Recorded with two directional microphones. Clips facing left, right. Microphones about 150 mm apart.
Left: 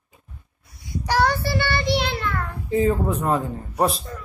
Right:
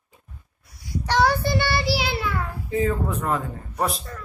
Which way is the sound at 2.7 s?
30° left (ahead or behind).